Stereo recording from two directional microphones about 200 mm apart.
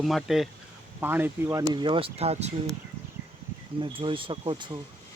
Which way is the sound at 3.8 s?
25° right (ahead or behind).